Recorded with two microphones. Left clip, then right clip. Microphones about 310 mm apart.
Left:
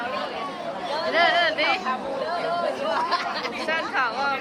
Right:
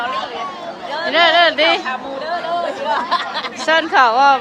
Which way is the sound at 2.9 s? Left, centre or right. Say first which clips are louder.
Right 6 dB; right.